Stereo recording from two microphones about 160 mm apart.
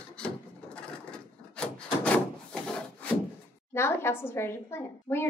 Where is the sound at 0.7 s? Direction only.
5° left (ahead or behind).